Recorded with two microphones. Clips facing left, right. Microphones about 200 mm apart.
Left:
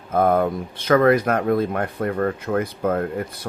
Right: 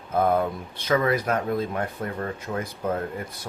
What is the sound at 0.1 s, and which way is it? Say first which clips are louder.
Speech: left 4 dB; 50° left (ahead or behind).